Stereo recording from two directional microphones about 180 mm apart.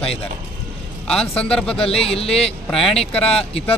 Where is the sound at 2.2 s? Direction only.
30° left (ahead or behind).